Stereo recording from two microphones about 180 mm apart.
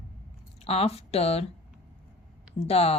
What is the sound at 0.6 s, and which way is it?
Speech, 35° left (ahead or behind).